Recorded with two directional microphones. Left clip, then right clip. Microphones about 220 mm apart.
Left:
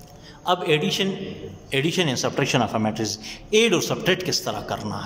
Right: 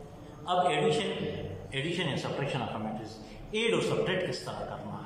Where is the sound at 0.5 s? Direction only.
45° left (ahead or behind).